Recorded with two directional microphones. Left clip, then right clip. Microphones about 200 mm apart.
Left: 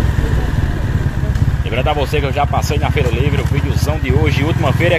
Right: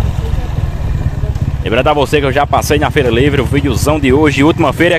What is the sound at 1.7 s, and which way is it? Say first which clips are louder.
Speech: right 7 dB; 60° right (ahead or behind).